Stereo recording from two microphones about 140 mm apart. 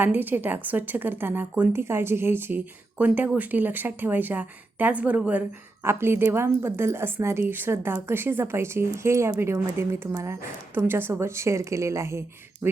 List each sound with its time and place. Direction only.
0.0 s a woman's voice: 15° right (ahead or behind)